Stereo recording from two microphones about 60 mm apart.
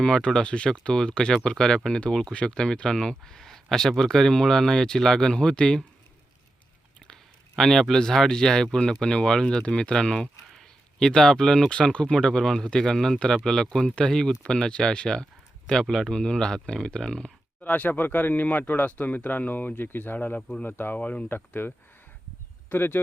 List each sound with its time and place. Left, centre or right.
0.0 s speech: centre
7.0 s speech: centre
17.6 s speech: left
20.7 s speech: left
21.3 s speech: left
22.7 s speech: left